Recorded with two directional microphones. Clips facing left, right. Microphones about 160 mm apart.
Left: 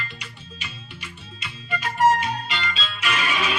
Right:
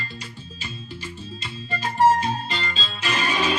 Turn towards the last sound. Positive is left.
turn(degrees=-35)  # may be behind; listen again after turning